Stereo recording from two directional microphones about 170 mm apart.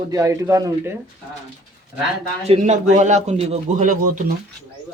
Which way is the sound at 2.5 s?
45° right (ahead or behind).